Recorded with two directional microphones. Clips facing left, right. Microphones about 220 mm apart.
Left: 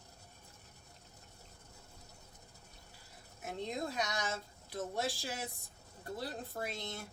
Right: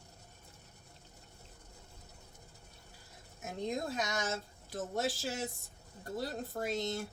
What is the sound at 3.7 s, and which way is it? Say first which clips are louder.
Speech: right 3 dB; 45° right (ahead or behind).